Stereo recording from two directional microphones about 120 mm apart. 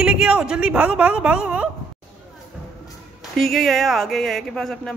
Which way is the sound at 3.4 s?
Centre (ahead or behind).